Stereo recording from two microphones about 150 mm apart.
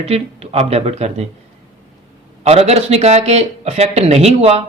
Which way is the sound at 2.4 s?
45° right (ahead or behind).